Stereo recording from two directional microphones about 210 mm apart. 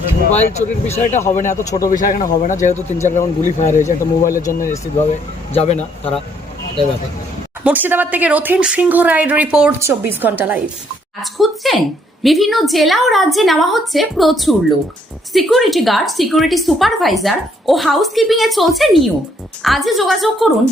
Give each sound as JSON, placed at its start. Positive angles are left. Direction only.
{"t": 0.5, "sound": "a man's voice", "side_deg": 30}
{"t": 5.5, "sound": "a man's voice", "side_deg": 30}
{"t": 7.6, "sound": "a woman's voice", "side_deg": -10}